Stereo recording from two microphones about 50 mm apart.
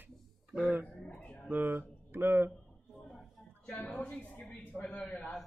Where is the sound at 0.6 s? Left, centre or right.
Right.